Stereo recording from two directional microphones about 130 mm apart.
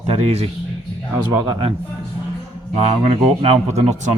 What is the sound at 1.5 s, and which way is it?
Speech, 45° right (ahead or behind).